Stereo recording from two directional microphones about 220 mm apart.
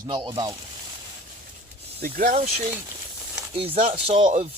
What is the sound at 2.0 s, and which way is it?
Speech, 35° right (ahead or behind).